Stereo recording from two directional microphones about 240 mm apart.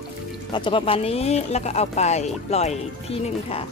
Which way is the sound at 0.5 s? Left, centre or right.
Left.